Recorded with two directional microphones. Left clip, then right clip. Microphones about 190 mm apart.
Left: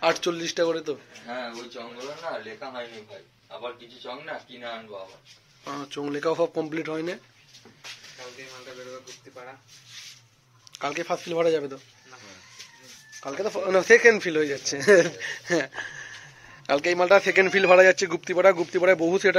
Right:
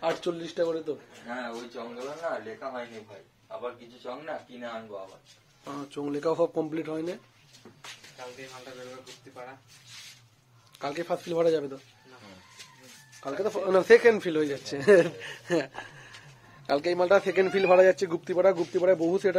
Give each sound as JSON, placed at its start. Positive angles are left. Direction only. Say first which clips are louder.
{"t": 0.0, "sound": "speech", "louder": "left 6 dB", "side_deg": 15}
{"t": 5.6, "sound": "speech", "louder": "left 4 dB", "side_deg": 15}
{"t": 5.9, "sound": "a man's voice", "louder": "left 2 dB", "side_deg": 0}
{"t": 10.7, "sound": "a man's voice", "louder": "left 3 dB", "side_deg": 0}
{"t": 13.2, "sound": "a man's voice", "louder": "left 1 dB", "side_deg": 0}
{"t": 18.7, "sound": "speech", "louder": "left 3 dB", "side_deg": 15}